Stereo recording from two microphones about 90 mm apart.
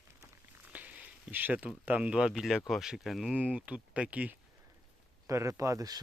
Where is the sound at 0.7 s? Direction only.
15° right (ahead or behind).